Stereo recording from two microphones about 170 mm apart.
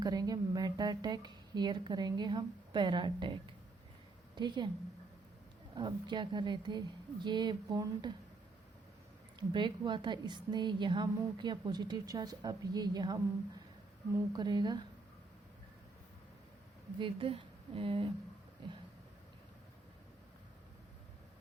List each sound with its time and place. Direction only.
0.0 s a woman's voice: 20° right (ahead or behind)
5.7 s a woman's voice: 25° right (ahead or behind)
9.5 s a woman's voice: 25° right (ahead or behind)
14.3 s a woman's voice: 25° right (ahead or behind)
17.0 s speech: 30° right (ahead or behind)